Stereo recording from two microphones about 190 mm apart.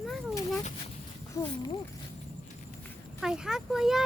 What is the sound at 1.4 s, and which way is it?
Speech, 15° left (ahead or behind).